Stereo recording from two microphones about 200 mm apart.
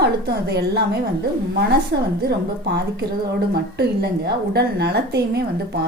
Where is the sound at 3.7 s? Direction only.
55° right (ahead or behind).